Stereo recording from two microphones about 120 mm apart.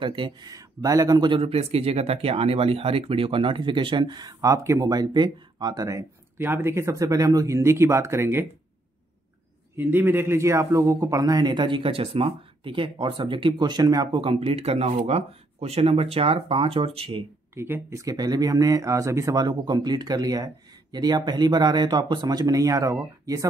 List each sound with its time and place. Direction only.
0.0 s speech: 45° right (ahead or behind)
1.3 s speech: 55° right (ahead or behind); by 8.5 s 20° right (ahead or behind)
9.8 s speech: 15° right (ahead or behind); by 14.2 s 35° right (ahead or behind)
14.2 s speech: 55° right (ahead or behind)
17.6 s speech: 20° right (ahead or behind)